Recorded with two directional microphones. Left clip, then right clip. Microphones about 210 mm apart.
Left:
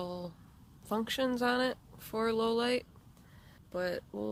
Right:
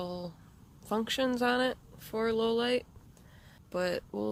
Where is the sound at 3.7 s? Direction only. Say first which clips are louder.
Right 3 dB; 20° right (ahead or behind).